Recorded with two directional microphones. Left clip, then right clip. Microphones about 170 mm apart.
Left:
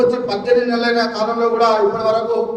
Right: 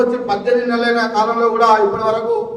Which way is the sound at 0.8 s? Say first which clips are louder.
Right 2 dB; 15° left (ahead or behind).